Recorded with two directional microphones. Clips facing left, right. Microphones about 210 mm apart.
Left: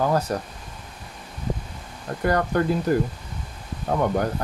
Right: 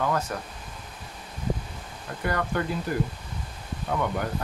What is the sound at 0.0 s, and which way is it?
Speech, 35° left (ahead or behind).